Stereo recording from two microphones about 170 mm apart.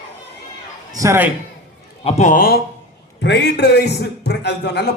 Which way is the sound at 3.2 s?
90° left.